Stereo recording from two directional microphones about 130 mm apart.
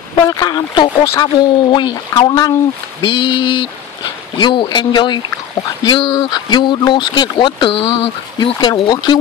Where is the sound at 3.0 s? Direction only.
40° left (ahead or behind).